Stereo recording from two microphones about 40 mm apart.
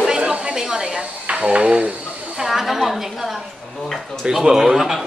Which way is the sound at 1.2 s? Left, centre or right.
Right.